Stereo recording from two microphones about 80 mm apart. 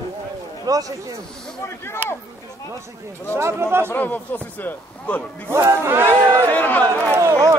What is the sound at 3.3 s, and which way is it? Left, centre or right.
Speech, right.